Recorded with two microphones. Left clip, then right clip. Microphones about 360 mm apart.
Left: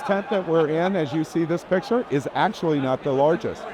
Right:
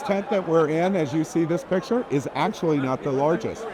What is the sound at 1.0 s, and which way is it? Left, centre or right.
Speech, centre.